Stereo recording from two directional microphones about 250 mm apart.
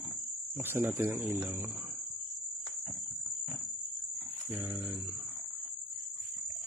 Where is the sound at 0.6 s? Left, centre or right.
Centre.